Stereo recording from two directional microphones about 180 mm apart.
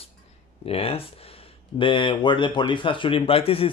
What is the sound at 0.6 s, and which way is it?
Speech, 30° left (ahead or behind).